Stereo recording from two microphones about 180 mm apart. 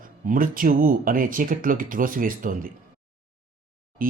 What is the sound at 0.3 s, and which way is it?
Speech, 50° right (ahead or behind).